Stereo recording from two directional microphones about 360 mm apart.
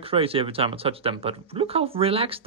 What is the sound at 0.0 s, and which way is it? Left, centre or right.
Speech, centre.